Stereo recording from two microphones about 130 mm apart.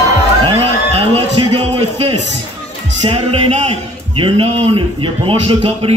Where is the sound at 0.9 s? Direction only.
45° right (ahead or behind).